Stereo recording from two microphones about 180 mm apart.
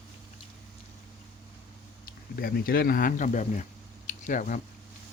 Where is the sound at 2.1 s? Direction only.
55° left (ahead or behind).